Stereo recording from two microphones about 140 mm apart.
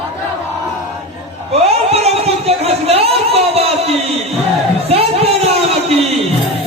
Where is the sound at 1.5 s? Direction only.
45° right (ahead or behind).